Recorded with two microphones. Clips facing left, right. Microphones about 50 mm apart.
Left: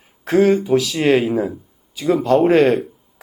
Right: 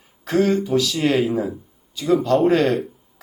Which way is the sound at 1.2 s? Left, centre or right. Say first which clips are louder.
Left 3 dB; centre.